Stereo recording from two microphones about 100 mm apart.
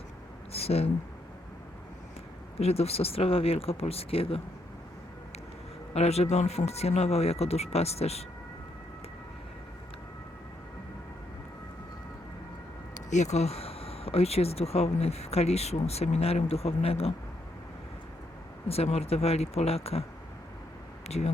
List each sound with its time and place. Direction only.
0.5 s a sound: 90° left
2.6 s speech: 90° left; by 4.4 s 75° left (ahead or behind)
5.9 s speech: 90° left
13.3 s speech: 90° left
18.7 s speech: 90° left
21.1 s speech: 90° left